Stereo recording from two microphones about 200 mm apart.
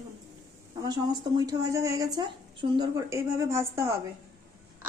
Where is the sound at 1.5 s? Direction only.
15° right (ahead or behind).